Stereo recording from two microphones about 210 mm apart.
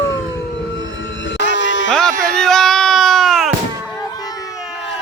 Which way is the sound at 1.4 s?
60° left (ahead or behind).